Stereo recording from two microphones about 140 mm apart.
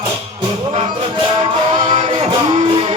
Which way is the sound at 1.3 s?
40° right (ahead or behind).